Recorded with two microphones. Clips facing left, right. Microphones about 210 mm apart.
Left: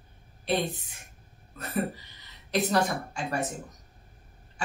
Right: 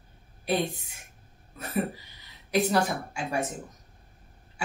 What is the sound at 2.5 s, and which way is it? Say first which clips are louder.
A woman's voice: right 1 dB; 10° right (ahead or behind).